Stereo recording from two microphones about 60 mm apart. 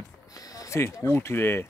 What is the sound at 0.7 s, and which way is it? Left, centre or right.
Speech, left.